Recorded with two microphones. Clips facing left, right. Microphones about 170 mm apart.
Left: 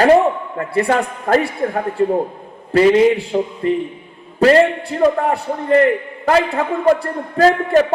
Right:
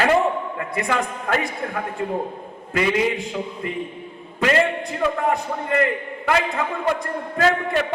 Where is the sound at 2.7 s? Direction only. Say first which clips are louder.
Left 9 dB; 35° left (ahead or behind).